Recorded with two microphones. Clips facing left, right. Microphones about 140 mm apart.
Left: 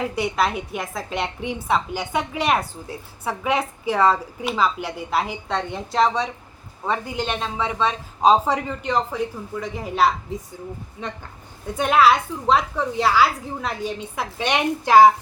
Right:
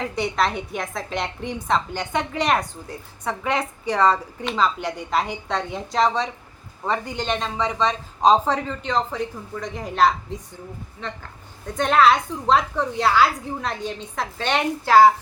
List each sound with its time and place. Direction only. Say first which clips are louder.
0.0 s a woman's voice: left 1 dB; 5° left (ahead or behind)
11.0 s speech: left 1 dB; 15° left (ahead or behind)
11.8 s a woman's voice: even; 5° left (ahead or behind)